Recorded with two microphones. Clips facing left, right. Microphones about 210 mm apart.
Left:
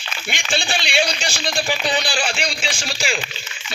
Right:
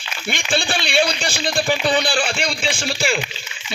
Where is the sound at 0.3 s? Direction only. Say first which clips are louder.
Right 3 dB; 55° right (ahead or behind).